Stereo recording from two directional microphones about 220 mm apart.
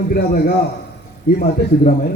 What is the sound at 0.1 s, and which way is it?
Speech, 40° left (ahead or behind).